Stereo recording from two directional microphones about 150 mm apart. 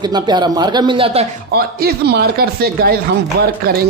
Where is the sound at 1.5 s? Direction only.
90° right.